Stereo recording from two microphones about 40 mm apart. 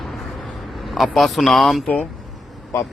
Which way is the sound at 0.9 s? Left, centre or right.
Centre.